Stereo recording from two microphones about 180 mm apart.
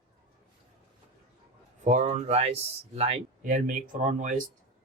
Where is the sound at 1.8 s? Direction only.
40° right (ahead or behind).